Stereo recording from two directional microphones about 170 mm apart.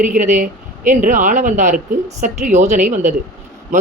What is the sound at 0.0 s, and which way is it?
A woman's voice, 50° right (ahead or behind).